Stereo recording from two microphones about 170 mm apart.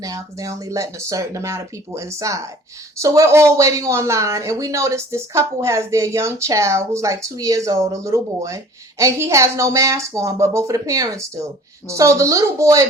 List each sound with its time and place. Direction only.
0.0 s speech: 20° right (ahead or behind)